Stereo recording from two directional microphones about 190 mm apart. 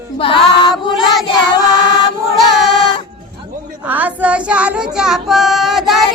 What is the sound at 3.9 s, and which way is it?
Child singing, 10° right (ahead or behind).